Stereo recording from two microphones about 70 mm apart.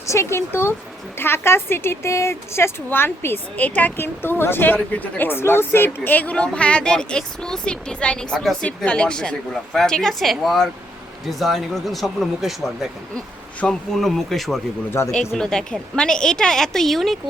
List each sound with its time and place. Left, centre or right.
0.0 s a woman's voice: left; by 12.9 s centre
13.9 s speech: centre
15.0 s a woman's voice: left
15.4 s a woman's voice: centre